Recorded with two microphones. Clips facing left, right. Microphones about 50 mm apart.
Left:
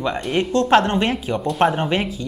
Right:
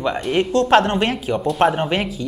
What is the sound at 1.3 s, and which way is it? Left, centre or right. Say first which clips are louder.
Speech: right 2 dB; centre.